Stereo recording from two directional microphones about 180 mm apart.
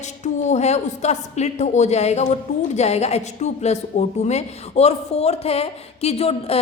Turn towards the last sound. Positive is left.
turn(degrees=35)  # may be behind; listen again after turning